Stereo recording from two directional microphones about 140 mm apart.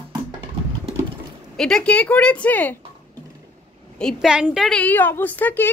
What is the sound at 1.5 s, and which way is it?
Speech, 5° left (ahead or behind).